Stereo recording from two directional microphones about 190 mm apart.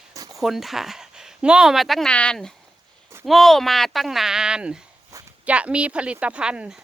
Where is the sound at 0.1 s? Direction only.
15° right (ahead or behind).